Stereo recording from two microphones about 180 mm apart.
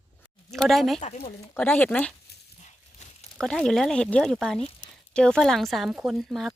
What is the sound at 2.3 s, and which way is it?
Dog, 65° left (ahead or behind).